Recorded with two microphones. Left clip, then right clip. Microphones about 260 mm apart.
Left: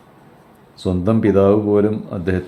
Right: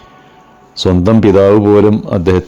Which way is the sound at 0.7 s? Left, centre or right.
Right.